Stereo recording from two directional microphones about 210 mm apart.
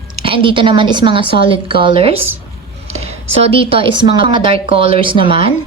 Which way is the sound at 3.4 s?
25° right (ahead or behind).